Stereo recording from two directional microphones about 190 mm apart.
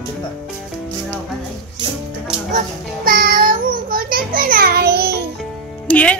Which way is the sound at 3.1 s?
50° right (ahead or behind).